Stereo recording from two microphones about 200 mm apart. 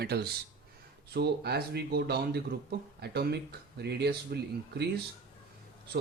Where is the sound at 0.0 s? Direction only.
55° right (ahead or behind).